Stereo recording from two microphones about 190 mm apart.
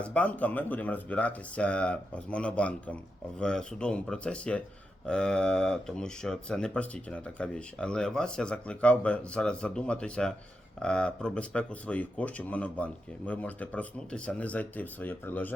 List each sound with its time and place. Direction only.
0.0 s speech: 5° left (ahead or behind)